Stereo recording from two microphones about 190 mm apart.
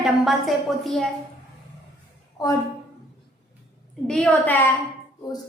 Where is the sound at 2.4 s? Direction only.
20° left (ahead or behind).